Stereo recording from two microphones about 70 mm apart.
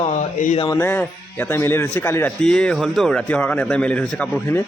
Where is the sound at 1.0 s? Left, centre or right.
Left.